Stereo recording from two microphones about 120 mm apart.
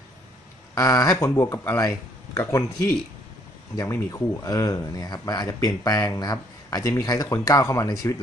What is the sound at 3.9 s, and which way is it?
Speech, 25° left (ahead or behind).